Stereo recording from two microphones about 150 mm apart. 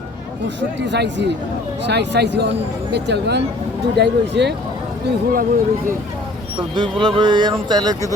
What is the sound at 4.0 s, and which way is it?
Speech, 90° right.